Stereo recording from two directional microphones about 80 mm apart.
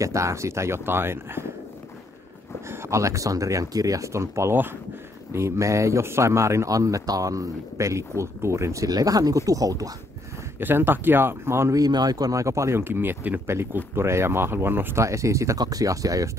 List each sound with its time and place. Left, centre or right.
0.0 s speech: right
2.7 s speech: right
8.8 s speech: right
10.6 s speech: right
11.8 s speech: right